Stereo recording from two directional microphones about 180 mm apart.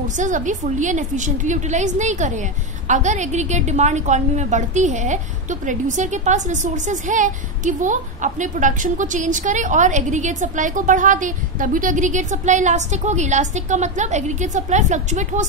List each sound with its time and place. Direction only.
0.2 s a woman's voice: 45° right (ahead or behind)